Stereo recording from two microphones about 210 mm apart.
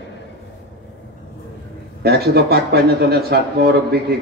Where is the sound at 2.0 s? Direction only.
50° right (ahead or behind).